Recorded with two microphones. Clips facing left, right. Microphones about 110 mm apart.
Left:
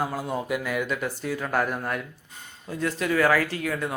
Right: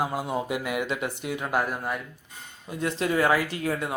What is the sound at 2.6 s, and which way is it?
Speech, 25° right (ahead or behind).